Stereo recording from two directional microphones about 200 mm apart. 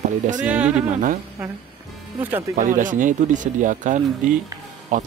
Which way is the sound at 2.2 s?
10° right (ahead or behind).